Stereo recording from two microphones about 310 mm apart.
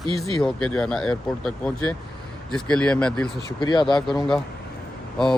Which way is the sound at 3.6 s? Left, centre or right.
Centre.